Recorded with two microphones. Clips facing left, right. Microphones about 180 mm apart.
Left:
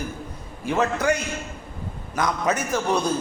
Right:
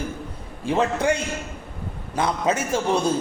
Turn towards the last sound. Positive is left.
turn(degrees=-25)  # may be behind; listen again after turning